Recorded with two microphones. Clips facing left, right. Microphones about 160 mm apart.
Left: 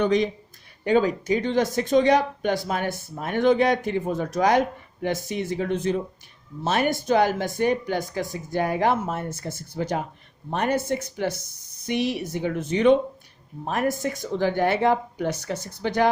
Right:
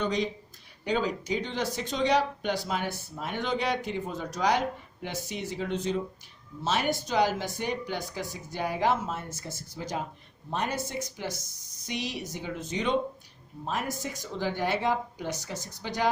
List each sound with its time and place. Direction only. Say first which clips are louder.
0.0 s speech: left 8 dB; 60° left (ahead or behind)